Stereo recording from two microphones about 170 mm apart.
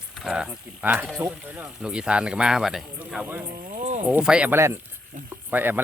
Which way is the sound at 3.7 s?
40° right (ahead or behind).